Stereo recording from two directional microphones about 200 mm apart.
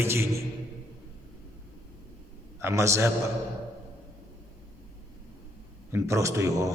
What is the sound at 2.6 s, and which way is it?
Speech, 15° right (ahead or behind).